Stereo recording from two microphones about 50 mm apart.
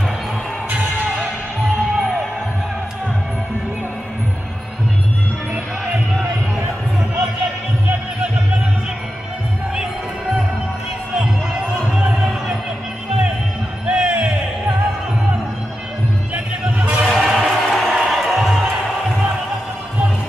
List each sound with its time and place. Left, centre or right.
2.0 s music: centre
11.9 s music: centre
13.8 s music: centre
16.6 s music: right
17.1 s music: centre